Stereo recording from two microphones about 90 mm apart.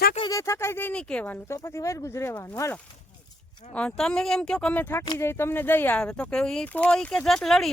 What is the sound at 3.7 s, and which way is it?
Speech, 10° left (ahead or behind).